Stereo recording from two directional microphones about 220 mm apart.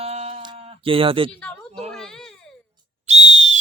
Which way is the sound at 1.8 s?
Centre (ahead or behind).